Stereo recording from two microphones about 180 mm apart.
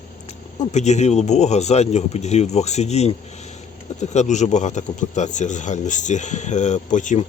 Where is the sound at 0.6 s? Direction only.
40° left (ahead or behind).